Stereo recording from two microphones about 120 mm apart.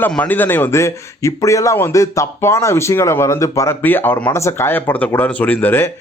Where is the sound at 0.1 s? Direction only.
15° left (ahead or behind).